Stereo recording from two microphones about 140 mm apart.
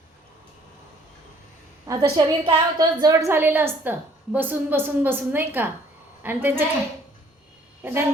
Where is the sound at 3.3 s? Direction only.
15° right (ahead or behind).